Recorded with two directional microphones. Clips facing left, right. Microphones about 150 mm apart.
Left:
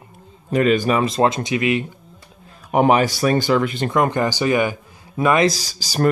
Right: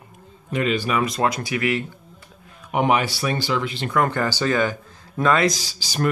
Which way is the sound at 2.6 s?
40° left (ahead or behind).